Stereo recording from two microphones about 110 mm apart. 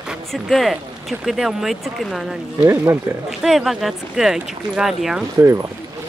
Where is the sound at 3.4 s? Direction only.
Centre (ahead or behind).